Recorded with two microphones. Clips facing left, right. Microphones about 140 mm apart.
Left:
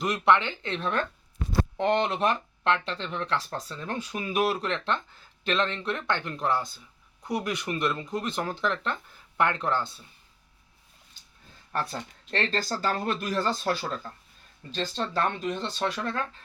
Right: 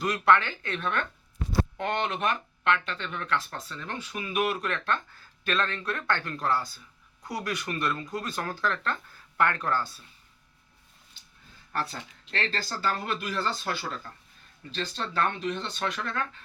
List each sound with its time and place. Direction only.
0.0 s speech: 20° left (ahead or behind)
12.3 s speech: 20° left (ahead or behind)
12.7 s speech: 45° left (ahead or behind)